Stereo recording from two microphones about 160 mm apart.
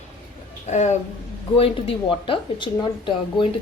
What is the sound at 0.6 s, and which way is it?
Speech, 45° left (ahead or behind).